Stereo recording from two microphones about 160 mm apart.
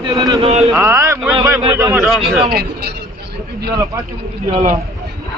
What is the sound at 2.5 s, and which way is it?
Speech, 80° right.